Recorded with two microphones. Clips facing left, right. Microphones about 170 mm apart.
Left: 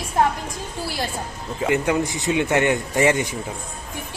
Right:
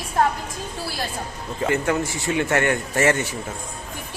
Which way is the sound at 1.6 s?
15° left (ahead or behind).